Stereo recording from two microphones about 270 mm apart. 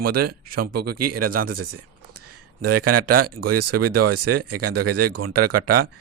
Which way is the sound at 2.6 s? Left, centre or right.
Right.